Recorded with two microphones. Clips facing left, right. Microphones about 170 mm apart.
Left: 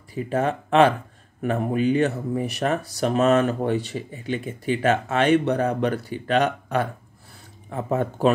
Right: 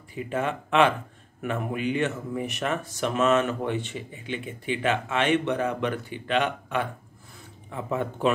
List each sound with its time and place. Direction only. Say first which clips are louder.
0.1 s speech: left 5 dB; 40° left (ahead or behind)